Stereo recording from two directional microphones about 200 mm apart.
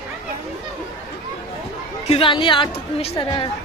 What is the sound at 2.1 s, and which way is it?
A woman's voice, 25° left (ahead or behind).